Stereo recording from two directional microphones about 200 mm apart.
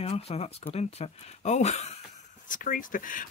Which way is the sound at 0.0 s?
30° left (ahead or behind).